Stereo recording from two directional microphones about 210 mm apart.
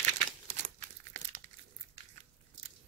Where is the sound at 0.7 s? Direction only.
35° right (ahead or behind).